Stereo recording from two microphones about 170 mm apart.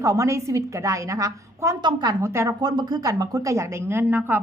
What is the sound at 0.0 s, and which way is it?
A woman's voice, 20° right (ahead or behind).